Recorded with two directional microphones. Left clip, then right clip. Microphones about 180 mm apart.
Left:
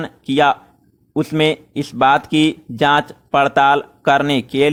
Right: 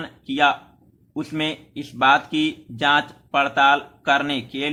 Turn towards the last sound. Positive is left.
turn(degrees=45)  # may be behind; listen again after turning